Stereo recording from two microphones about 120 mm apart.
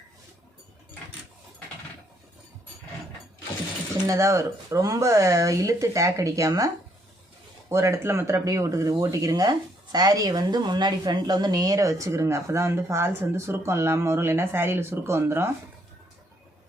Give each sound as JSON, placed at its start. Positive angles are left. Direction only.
{"t": 4.0, "sound": "speech", "side_deg": -25}
{"t": 7.7, "sound": "speech", "side_deg": -25}